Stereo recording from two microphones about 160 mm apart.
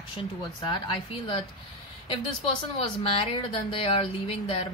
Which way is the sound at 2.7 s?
35° left (ahead or behind).